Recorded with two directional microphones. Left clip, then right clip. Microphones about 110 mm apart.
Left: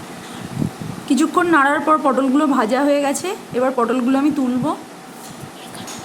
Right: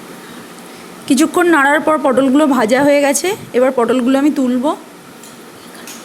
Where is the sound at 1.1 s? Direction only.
55° right (ahead or behind).